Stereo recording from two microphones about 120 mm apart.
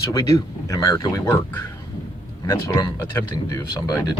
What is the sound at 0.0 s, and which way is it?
Speech, 30° left (ahead or behind).